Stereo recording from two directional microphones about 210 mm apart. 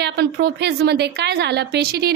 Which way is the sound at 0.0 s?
50° right (ahead or behind).